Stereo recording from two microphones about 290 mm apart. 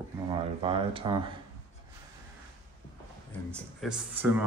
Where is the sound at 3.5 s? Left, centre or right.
Centre.